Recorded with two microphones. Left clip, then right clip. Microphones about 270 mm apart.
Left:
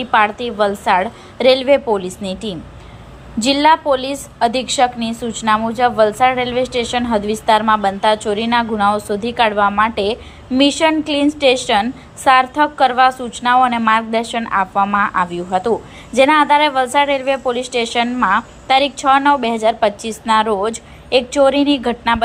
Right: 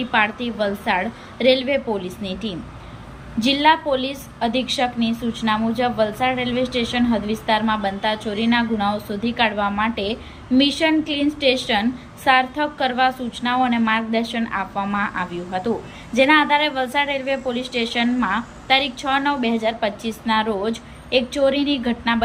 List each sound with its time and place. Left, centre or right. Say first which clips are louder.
0.0 s a woman's voice: left 5 dB; centre